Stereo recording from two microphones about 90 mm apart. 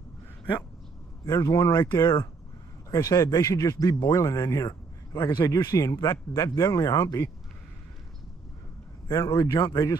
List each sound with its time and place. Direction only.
1.2 s speech: 40° left (ahead or behind)
9.0 s speech: 45° left (ahead or behind)